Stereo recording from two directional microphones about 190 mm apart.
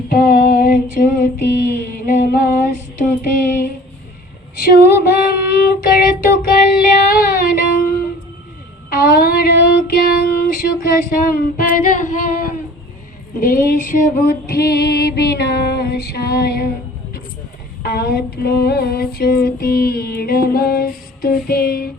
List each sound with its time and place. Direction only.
0.1 s female singing: 50° left (ahead or behind)
7.1 s music: 50° left (ahead or behind)
8.9 s female singing: 50° left (ahead or behind)
17.8 s female singing: 55° left (ahead or behind)